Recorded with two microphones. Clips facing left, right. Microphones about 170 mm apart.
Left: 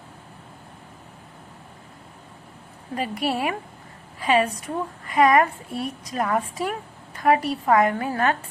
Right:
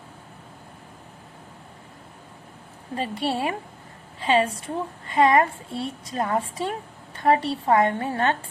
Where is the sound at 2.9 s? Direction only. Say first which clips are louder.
Left 1 dB; 30° right (ahead or behind).